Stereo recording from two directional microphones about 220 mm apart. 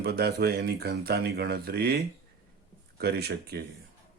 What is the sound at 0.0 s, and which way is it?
Speech, 45° right (ahead or behind).